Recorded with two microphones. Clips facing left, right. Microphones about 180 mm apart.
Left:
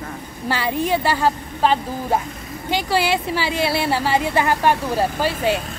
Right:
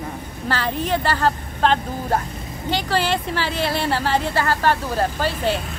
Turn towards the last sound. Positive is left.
turn(degrees=10)  # may be behind; listen again after turning